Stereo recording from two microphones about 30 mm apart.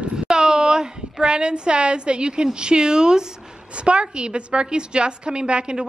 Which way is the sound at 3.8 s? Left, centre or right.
Right.